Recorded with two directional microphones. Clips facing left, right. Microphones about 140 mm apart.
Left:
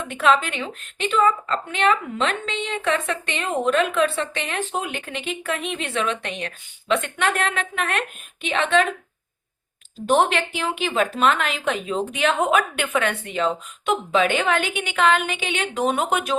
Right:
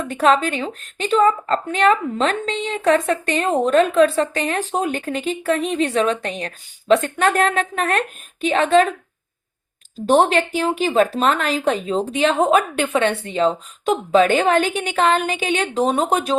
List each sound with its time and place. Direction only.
0.0 s a woman's voice: 40° right (ahead or behind)
10.1 s a woman's voice: 35° right (ahead or behind)